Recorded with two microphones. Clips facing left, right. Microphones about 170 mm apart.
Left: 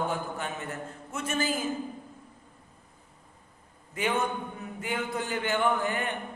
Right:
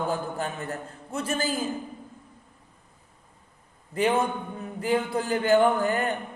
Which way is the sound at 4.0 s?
35° right (ahead or behind).